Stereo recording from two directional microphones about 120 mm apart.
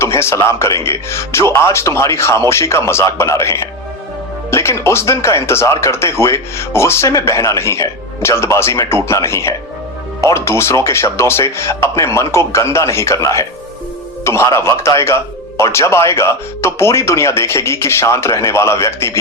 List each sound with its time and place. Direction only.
0.0 s speech: 20° left (ahead or behind)